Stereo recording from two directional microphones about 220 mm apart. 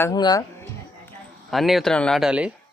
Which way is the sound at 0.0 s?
15° left (ahead or behind).